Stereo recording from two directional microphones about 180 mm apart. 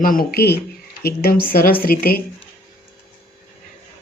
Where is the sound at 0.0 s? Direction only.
50° left (ahead or behind).